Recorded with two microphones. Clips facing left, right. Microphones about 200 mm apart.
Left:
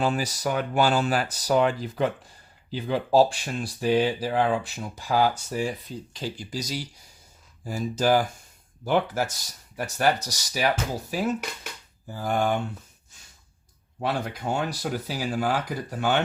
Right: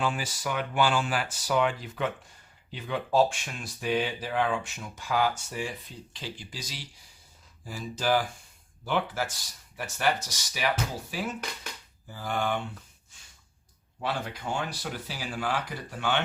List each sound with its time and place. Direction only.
0.0 s speech: 40° left (ahead or behind)
14.0 s speech: 40° left (ahead or behind)